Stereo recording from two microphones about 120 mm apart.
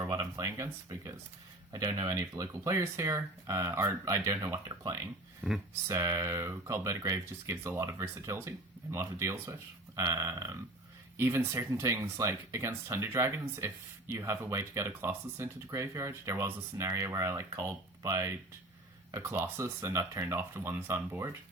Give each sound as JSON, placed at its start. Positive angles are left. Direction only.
{"t": 0.0, "sound": "a sound", "side_deg": -30}
{"t": 1.7, "sound": "speech", "side_deg": -35}
{"t": 4.5, "sound": "speech", "side_deg": -35}
{"t": 5.4, "sound": "speech", "side_deg": -5}
{"t": 5.9, "sound": "speech", "side_deg": -25}